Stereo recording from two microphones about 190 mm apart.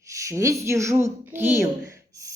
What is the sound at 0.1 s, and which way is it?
A woman's voice, 15° right (ahead or behind).